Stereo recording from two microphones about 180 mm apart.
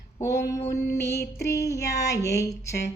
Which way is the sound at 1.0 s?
60° left (ahead or behind).